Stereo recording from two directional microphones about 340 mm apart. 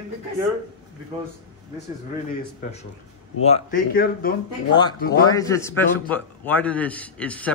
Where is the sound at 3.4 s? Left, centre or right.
Left.